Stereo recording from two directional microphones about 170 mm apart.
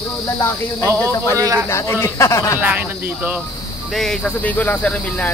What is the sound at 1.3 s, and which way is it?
Speech, 20° right (ahead or behind).